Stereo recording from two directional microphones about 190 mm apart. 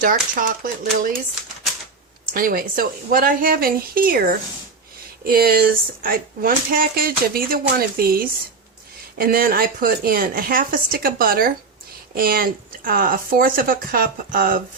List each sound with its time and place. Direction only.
0.0 s speech: 45° right (ahead or behind)
2.3 s speech: 50° right (ahead or behind)